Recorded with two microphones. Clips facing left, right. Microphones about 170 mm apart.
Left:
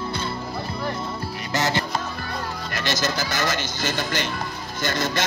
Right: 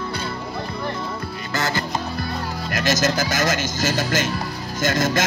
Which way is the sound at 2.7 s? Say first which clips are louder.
Right 6 dB; 45° right (ahead or behind).